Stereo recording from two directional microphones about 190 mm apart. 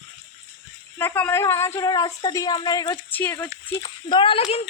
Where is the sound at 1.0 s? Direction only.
10° left (ahead or behind).